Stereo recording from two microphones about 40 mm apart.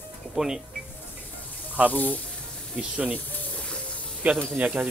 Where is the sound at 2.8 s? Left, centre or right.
Right.